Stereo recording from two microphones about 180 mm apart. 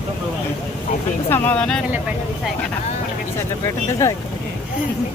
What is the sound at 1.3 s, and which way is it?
Speech, 10° left (ahead or behind).